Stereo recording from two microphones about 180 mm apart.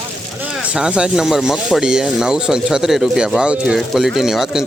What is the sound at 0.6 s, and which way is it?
Speech, 5° right (ahead or behind).